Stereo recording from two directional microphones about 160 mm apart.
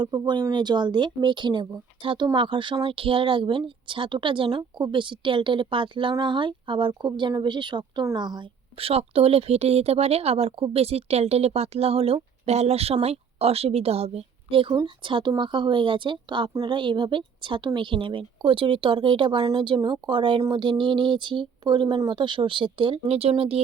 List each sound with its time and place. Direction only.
0.0 s speech: 30° right (ahead or behind)